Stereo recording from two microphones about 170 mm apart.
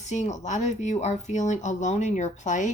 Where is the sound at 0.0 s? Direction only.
45° left (ahead or behind).